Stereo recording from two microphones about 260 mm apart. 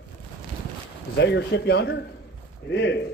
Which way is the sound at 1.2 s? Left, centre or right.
Left.